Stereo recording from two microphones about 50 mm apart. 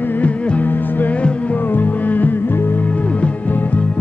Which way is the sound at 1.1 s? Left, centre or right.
Left.